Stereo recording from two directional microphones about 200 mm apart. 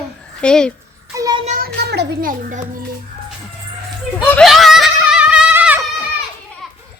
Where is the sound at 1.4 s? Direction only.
45° right (ahead or behind).